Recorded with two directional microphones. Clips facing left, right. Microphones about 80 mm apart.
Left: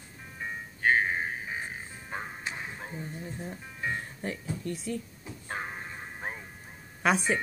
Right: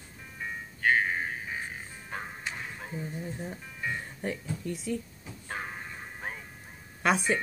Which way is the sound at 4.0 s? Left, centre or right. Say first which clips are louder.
Right 1 dB; centre.